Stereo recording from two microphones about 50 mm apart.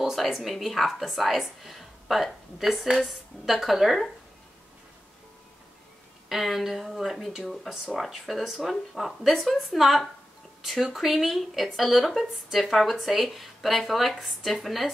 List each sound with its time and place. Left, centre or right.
0.0 s a woman's voice: centre
6.2 s speech: centre